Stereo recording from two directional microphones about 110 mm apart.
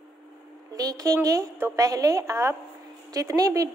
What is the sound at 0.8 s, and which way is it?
A woman's voice, 35° right (ahead or behind).